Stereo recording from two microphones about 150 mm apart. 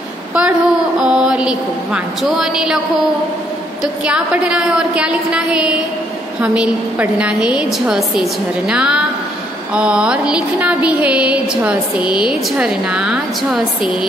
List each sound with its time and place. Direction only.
0.3 s a woman's voice: 5° right (ahead or behind)
3.8 s a woman's voice: 5° right (ahead or behind)